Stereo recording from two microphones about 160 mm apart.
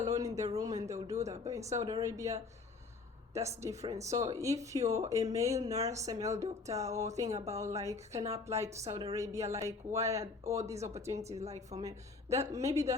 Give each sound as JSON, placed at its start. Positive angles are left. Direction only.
{"t": 0.1, "sound": "speech", "side_deg": -20}
{"t": 3.5, "sound": "speech", "side_deg": -20}
{"t": 11.3, "sound": "a woman's voice", "side_deg": -45}
{"t": 11.8, "sound": "a woman's voice", "side_deg": -20}